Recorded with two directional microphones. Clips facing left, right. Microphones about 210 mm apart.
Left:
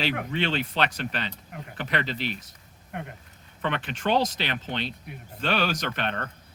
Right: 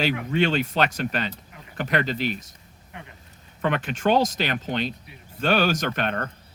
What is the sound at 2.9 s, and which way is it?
Speech, 55° left (ahead or behind).